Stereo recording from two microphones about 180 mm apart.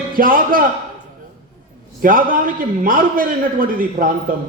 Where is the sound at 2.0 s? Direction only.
50° right (ahead or behind).